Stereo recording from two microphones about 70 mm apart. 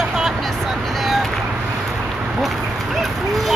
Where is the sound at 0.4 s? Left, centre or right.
Centre.